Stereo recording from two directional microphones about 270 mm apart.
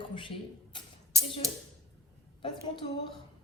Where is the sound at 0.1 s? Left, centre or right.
Centre.